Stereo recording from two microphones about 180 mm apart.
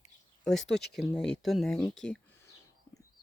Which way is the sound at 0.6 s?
70° left (ahead or behind).